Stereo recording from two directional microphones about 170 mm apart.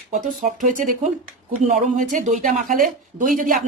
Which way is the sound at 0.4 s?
50° right (ahead or behind).